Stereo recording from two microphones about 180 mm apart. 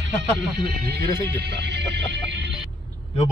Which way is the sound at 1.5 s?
70° right (ahead or behind).